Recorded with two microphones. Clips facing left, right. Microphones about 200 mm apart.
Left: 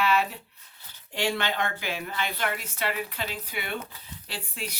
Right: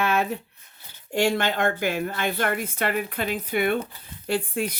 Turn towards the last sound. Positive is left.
turn(degrees=-55)  # may be behind; listen again after turning